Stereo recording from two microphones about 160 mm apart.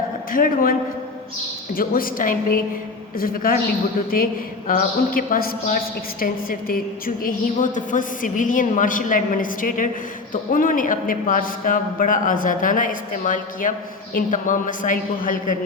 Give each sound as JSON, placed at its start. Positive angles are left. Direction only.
{"t": 0.3, "sound": "a woman's voice", "side_deg": 60}
{"t": 4.7, "sound": "a woman's voice", "side_deg": 60}